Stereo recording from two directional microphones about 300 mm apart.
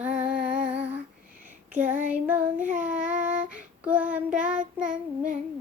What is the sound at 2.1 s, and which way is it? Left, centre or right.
Child singing, centre.